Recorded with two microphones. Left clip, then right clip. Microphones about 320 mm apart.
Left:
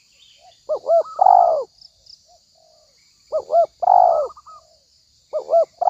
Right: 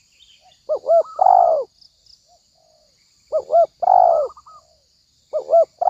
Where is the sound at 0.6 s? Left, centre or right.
Centre.